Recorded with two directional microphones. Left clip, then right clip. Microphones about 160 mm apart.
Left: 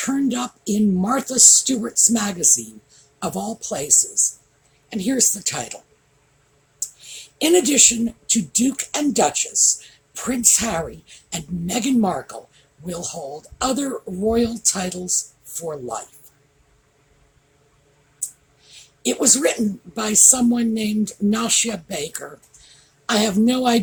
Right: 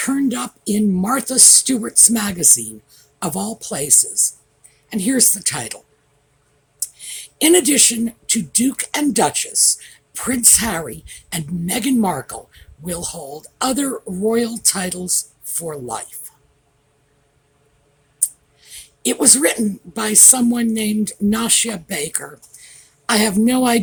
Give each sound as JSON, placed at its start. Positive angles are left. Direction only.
{"t": 0.0, "sound": "speech", "side_deg": -45}
{"t": 18.2, "sound": "speech", "side_deg": -50}